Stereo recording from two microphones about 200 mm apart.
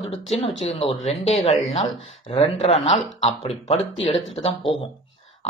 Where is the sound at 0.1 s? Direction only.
30° left (ahead or behind).